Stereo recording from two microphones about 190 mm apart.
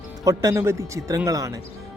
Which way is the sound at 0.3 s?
15° right (ahead or behind).